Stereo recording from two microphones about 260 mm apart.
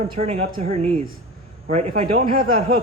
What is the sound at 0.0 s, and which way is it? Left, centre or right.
A man's voice, right.